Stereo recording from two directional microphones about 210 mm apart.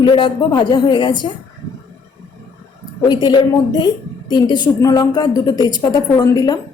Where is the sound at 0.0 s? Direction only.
25° left (ahead or behind).